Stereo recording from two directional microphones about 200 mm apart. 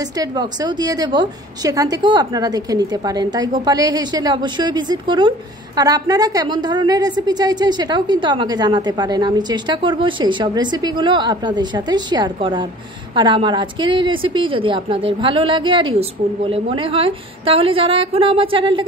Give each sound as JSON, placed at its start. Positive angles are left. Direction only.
{"t": 0.2, "sound": "a woman's voice", "side_deg": -20}